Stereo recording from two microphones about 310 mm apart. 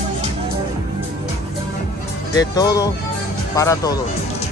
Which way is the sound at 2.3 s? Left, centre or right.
Centre.